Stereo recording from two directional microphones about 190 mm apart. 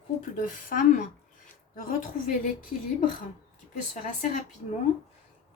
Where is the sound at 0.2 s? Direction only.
45° left (ahead or behind).